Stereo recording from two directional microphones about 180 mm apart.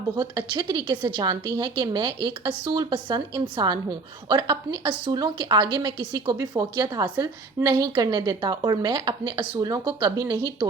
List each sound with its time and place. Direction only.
0.2 s a woman's voice: 25° right (ahead or behind)